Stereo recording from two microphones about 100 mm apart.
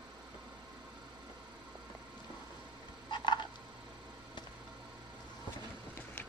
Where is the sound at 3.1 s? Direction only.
50° left (ahead or behind).